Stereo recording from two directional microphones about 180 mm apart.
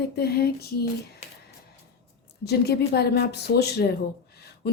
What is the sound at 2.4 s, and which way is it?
Speech, 60° left (ahead or behind).